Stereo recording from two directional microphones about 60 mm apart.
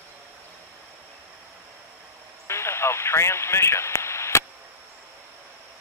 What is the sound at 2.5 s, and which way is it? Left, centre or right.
Radio, left.